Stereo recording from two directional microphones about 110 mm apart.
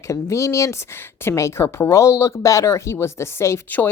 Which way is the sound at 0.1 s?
30° left (ahead or behind).